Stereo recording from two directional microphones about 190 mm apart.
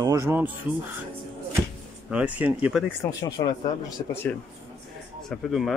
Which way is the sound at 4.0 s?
25° left (ahead or behind).